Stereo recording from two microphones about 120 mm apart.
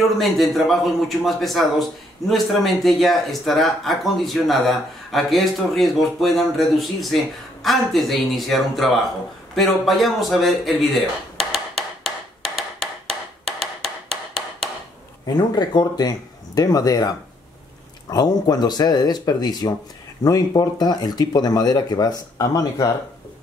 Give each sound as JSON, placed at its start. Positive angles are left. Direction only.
{"t": 0.2, "sound": "a man's voice", "side_deg": 0}
{"t": 9.6, "sound": "a sound", "side_deg": 0}
{"t": 15.3, "sound": "speech", "side_deg": 35}
{"t": 18.1, "sound": "speech", "side_deg": 35}